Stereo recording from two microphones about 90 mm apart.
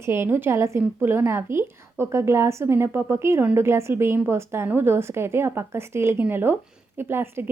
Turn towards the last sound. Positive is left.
turn(degrees=-25)  # may be behind; listen again after turning